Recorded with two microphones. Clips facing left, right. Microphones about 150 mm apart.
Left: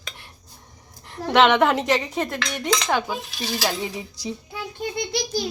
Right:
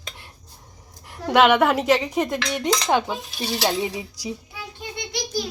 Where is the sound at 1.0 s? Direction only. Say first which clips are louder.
Even; 10° right (ahead or behind).